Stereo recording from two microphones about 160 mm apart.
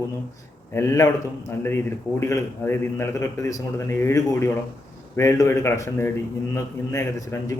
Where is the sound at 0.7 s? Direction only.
15° left (ahead or behind).